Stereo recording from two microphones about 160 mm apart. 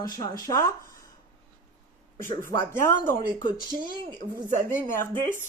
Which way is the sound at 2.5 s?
15° left (ahead or behind).